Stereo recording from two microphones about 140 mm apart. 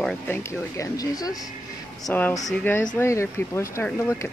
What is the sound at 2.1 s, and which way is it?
Speech, 10° left (ahead or behind).